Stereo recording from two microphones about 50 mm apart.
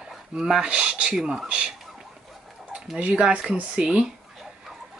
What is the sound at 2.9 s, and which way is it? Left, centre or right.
Speech, right.